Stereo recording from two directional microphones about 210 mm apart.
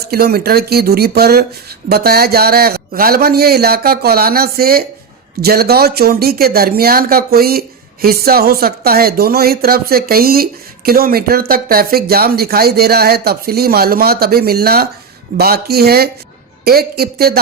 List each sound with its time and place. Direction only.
0.0 s speech: 50° right (ahead or behind)